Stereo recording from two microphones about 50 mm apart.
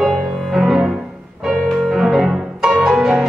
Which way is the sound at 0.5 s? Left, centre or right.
Centre.